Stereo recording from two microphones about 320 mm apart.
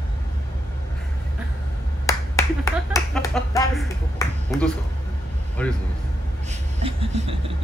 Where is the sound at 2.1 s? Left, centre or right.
Centre.